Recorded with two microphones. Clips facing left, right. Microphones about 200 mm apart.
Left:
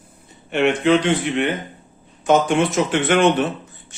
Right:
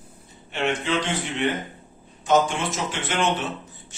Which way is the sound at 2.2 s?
60° left (ahead or behind).